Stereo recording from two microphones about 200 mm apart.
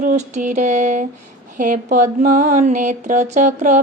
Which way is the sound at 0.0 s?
40° right (ahead or behind).